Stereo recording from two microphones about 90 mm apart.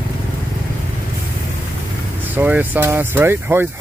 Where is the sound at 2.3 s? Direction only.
20° right (ahead or behind).